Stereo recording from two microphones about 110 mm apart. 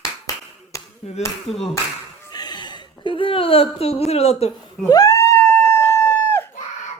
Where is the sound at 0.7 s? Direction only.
30° left (ahead or behind).